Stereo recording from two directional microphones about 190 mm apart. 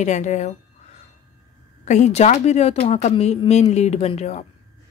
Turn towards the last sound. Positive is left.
turn(degrees=35)  # may be behind; listen again after turning